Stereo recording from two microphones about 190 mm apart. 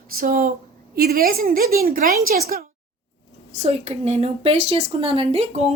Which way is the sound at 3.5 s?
35° right (ahead or behind).